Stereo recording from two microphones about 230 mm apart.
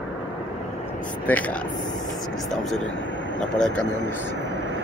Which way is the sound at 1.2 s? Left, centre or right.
Centre.